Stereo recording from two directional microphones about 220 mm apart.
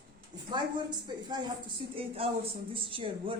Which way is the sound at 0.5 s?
20° right (ahead or behind).